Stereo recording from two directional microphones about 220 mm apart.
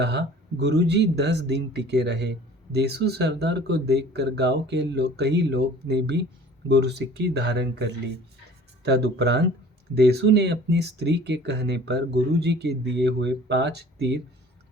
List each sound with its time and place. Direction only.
0.0 s speech: 50° right (ahead or behind)